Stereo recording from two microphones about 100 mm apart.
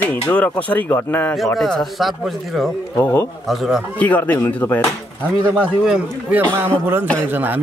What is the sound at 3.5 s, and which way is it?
Speech, 5° right (ahead or behind).